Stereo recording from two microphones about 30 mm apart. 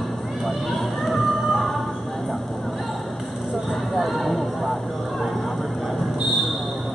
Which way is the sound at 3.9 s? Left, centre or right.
Centre.